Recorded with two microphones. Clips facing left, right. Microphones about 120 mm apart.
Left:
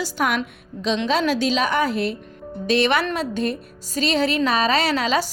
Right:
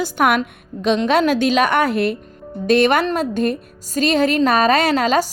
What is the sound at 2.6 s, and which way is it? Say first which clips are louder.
A woman's voice: right 5 dB; 50° right (ahead or behind).